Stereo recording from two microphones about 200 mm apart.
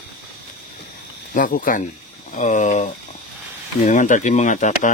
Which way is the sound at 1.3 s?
40° left (ahead or behind).